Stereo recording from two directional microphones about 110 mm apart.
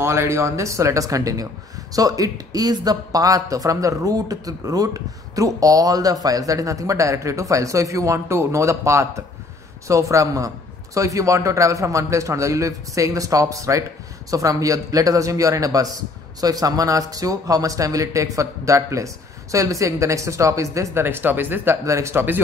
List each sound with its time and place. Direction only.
0.0 s speech: 25° right (ahead or behind)